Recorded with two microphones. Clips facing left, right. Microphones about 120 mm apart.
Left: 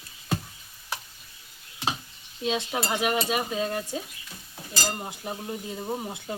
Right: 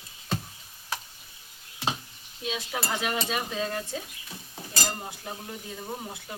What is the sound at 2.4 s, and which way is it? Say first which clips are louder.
Dishes: left 4 dB; 25° left (ahead or behind).